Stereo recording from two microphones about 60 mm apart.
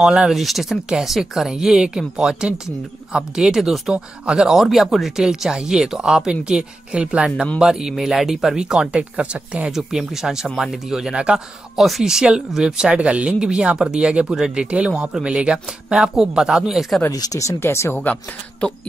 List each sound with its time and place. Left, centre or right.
0.0 s speech: centre
0.3 s speech: centre; by 9.7 s right
9.7 s speech: centre
17.1 s speech: left
17.9 s speech: left
18.6 s speech: centre